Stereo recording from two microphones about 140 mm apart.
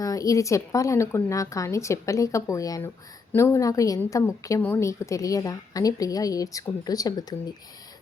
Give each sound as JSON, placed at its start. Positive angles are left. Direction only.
{"t": 0.0, "sound": "a woman's voice", "side_deg": 25}